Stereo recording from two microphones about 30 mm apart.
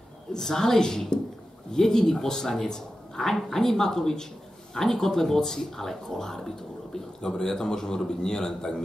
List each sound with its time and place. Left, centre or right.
0.4 s speech: centre